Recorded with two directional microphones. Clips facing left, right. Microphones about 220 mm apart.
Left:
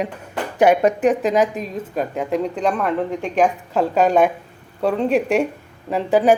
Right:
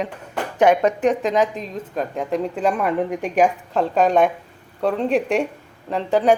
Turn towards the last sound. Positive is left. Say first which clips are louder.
# left 2 dB
turn(degrees=5)  # may be behind; listen again after turning